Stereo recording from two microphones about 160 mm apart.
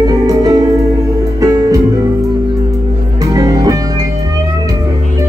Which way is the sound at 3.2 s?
20° right (ahead or behind).